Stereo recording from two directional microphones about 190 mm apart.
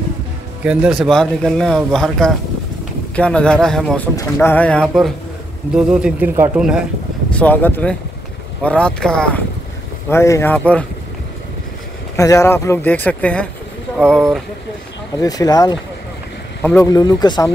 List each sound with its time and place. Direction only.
0.7 s speech: 5° right (ahead or behind)
7.3 s speech: 10° left (ahead or behind)
12.2 s speech: 15° left (ahead or behind)
15.1 s speech: 20° left (ahead or behind)